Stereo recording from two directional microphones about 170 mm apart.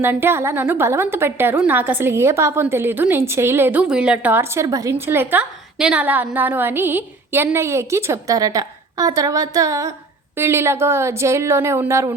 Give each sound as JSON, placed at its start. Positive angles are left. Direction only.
{"t": 0.0, "sound": "a woman's voice", "side_deg": -15}